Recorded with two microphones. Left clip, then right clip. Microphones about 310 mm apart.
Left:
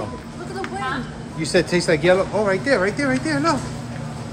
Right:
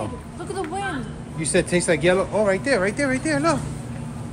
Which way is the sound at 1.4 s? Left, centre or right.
Centre.